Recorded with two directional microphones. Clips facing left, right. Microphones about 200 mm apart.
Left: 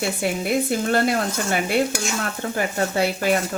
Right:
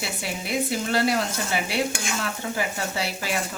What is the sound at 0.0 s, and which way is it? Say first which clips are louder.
Speech: left 8 dB; 50° left (ahead or behind).